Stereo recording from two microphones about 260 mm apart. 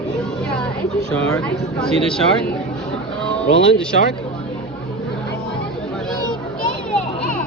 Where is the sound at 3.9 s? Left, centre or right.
Left.